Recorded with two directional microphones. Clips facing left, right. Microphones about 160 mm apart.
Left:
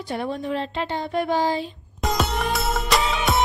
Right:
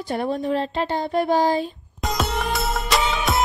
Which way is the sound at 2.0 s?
Centre (ahead or behind).